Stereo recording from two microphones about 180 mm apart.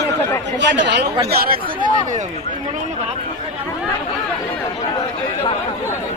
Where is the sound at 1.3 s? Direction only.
60° right (ahead or behind).